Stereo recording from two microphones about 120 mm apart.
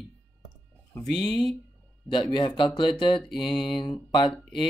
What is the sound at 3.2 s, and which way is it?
Mantra, centre (ahead or behind).